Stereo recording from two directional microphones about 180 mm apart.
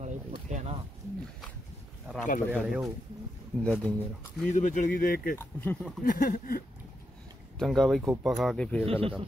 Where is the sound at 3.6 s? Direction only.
5° left (ahead or behind).